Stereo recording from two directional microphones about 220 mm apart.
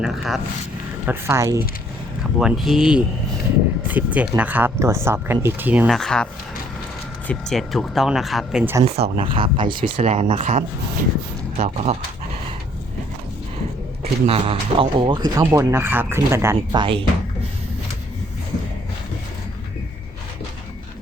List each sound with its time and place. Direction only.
0.0 s speech: centre (ahead or behind)
1.0 s speech: 15° right (ahead or behind)
2.4 s speech: centre (ahead or behind)
7.3 s speech: centre (ahead or behind)
9.0 s speech: 25° right (ahead or behind)
14.0 s speech: 25° right (ahead or behind)